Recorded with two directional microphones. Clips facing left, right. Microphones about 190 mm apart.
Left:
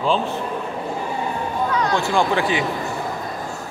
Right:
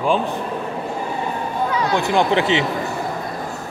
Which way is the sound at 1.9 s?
20° right (ahead or behind).